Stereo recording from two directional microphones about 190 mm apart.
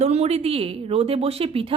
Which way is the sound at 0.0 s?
35° right (ahead or behind).